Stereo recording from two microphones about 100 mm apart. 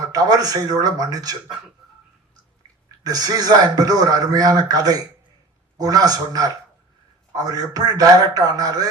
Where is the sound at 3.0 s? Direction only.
40° right (ahead or behind).